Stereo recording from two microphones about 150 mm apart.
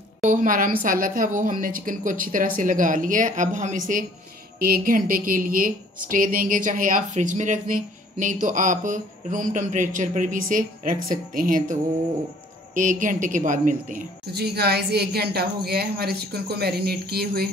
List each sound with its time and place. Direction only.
0.2 s a woman's voice: 55° right (ahead or behind)
4.6 s a woman's voice: 85° right